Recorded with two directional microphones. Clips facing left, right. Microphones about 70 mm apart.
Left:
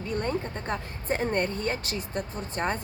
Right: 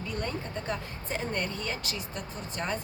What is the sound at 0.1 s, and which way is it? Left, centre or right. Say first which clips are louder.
Speech: left 6 dB; left.